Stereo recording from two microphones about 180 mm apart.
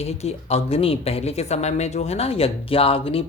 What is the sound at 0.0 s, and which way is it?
Speech, 35° left (ahead or behind).